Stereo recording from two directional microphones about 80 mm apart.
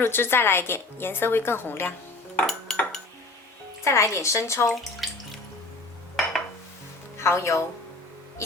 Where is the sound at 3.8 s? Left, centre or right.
Left.